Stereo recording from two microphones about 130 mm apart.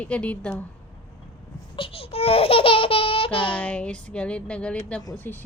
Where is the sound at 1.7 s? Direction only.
45° left (ahead or behind).